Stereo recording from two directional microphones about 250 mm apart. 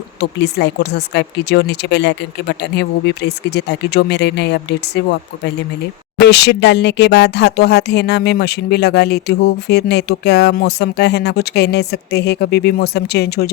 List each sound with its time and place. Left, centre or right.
0.2 s speech: left
6.1 s speech: left